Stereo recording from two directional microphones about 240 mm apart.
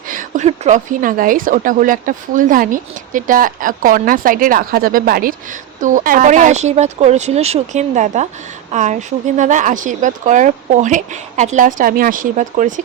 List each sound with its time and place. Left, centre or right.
0.1 s speech: right